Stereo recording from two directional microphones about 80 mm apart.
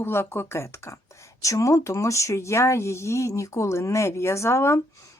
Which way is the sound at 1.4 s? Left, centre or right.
Left.